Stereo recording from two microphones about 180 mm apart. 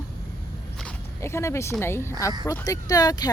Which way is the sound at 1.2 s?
15° left (ahead or behind).